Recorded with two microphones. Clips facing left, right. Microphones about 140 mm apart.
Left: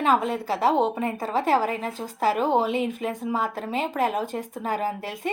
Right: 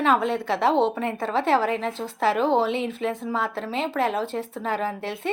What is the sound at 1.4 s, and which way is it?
Speech, 40° left (ahead or behind).